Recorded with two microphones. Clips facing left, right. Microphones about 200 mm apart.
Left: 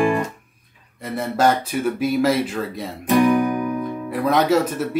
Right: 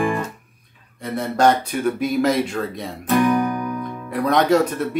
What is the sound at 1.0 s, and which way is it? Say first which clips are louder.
Speech: right 1 dB; 5° left (ahead or behind).